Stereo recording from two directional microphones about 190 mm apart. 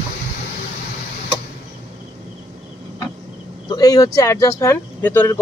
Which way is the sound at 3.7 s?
20° left (ahead or behind).